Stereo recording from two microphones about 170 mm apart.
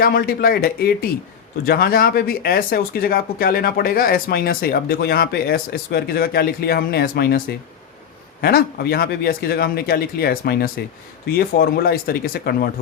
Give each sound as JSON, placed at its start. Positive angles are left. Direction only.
{"t": 0.0, "sound": "speech", "side_deg": 60}